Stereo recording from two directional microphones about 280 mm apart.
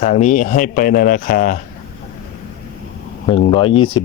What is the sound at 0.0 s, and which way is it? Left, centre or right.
Speech, left.